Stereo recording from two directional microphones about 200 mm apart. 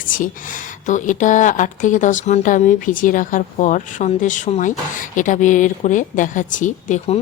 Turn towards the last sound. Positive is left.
turn(degrees=35)  # may be behind; listen again after turning